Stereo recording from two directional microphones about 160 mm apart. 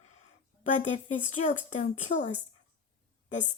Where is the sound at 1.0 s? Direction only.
50° left (ahead or behind).